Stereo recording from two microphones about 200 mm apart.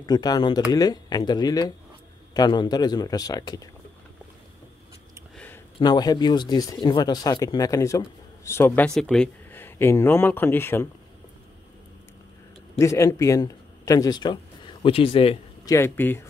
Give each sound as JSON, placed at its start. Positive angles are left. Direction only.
{"t": 0.0, "sound": "speech", "side_deg": 20}
{"t": 5.3, "sound": "a sound", "side_deg": 5}
{"t": 5.8, "sound": "speech", "side_deg": 20}
{"t": 12.7, "sound": "speech", "side_deg": 15}
{"t": 15.7, "sound": "speech", "side_deg": 10}